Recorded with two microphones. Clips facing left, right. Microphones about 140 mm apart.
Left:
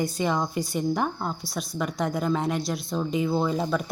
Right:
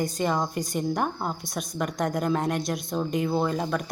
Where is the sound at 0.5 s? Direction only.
45° right (ahead or behind).